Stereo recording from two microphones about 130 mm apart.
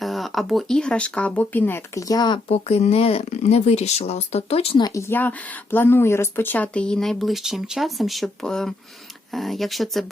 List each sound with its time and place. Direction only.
0.0 s speech: centre (ahead or behind); by 2.4 s 35° left (ahead or behind)
2.5 s speech: 55° left (ahead or behind)
4.8 s speech: 25° left (ahead or behind); by 10.1 s centre (ahead or behind)